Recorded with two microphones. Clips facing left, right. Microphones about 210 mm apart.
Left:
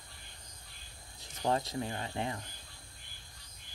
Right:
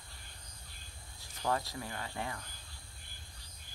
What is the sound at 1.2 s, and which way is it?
Speech, 20° left (ahead or behind).